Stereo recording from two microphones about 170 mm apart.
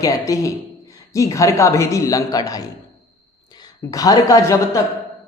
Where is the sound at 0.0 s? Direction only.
20° left (ahead or behind).